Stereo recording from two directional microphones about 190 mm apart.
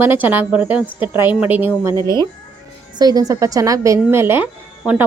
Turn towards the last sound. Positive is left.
turn(degrees=-10)  # may be behind; listen again after turning